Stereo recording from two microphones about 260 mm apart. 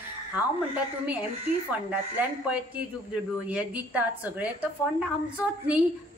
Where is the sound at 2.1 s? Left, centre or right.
Centre.